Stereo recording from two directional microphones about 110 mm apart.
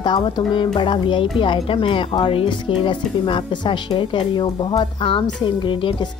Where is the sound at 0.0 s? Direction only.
45° left (ahead or behind).